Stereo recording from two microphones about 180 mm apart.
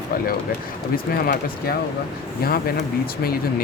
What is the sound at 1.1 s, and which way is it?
Speech, 55° left (ahead or behind).